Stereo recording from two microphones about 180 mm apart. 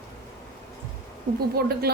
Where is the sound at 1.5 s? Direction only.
60° right (ahead or behind).